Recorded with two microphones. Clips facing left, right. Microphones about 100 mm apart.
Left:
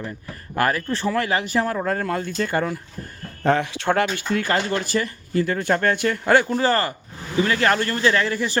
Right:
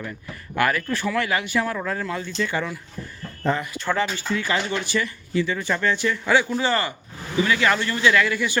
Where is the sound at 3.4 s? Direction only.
80° left.